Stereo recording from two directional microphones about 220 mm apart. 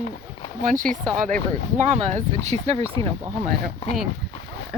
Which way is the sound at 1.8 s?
30° right (ahead or behind).